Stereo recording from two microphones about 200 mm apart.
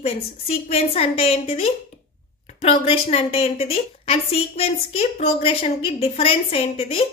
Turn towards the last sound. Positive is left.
turn(degrees=30)  # may be behind; listen again after turning